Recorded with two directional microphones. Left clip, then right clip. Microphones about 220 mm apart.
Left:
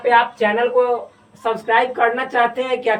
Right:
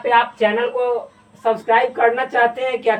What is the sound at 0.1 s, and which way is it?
A woman's voice, 5° right (ahead or behind).